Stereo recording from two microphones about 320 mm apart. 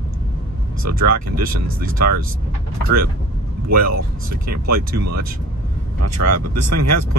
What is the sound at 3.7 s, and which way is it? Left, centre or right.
Speech, right.